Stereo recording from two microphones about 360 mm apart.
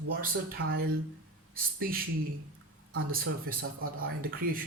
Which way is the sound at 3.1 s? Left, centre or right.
Right.